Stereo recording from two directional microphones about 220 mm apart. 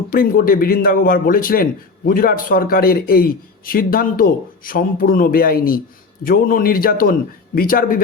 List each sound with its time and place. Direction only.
0.1 s speech: 40° left (ahead or behind)